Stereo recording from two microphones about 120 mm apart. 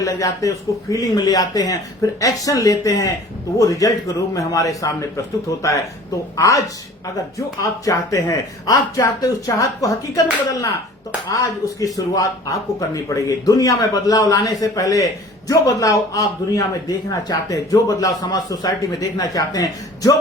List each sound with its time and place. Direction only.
0.0 s speech: 30° left (ahead or behind)
11.3 s a man's voice: 30° left (ahead or behind)